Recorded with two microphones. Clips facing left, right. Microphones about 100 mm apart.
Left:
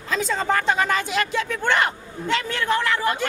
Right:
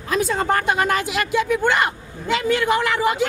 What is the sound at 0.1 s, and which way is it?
Speech, 10° right (ahead or behind).